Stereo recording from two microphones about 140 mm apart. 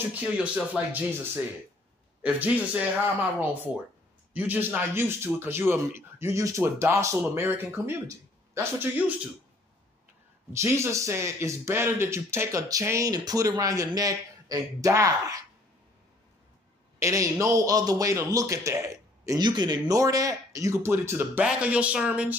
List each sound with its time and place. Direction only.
0.1 s a man's voice: 10° right (ahead or behind)
4.3 s a man's voice: 10° right (ahead or behind)
10.5 s a man's voice: 20° right (ahead or behind)
17.0 s a man's voice: 20° right (ahead or behind)